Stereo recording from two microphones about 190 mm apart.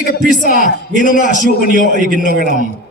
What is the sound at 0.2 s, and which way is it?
Speech, 45° right (ahead or behind).